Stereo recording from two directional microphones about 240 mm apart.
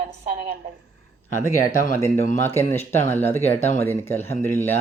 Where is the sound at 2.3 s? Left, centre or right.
Centre.